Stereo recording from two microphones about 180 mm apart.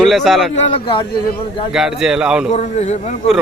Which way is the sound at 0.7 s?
30° left (ahead or behind).